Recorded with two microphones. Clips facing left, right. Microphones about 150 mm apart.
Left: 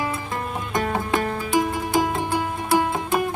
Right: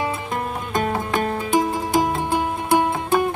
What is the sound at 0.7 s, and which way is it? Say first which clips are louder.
Music: even; 25° right (ahead or behind).